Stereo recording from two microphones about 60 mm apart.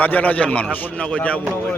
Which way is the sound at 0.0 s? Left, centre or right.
Left.